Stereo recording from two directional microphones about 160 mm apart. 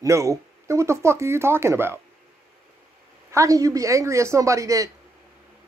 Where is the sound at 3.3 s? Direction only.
20° right (ahead or behind).